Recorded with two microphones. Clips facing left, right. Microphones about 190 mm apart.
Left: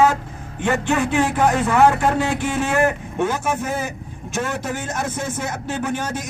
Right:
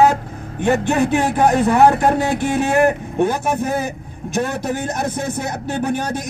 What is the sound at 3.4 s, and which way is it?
Speech, 35° right (ahead or behind).